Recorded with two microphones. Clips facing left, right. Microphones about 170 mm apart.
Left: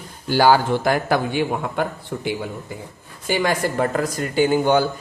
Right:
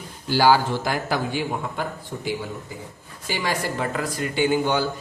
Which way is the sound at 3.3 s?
50° left (ahead or behind).